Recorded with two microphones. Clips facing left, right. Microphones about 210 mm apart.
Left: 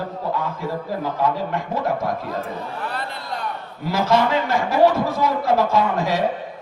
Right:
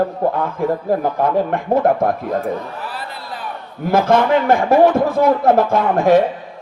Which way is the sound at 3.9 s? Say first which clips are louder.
Right 5 dB; 55° right (ahead or behind).